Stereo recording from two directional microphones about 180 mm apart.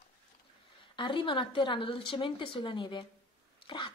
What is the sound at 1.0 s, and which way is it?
A woman's voice, 25° left (ahead or behind).